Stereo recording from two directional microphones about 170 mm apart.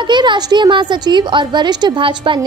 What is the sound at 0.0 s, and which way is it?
A woman's voice, 25° right (ahead or behind).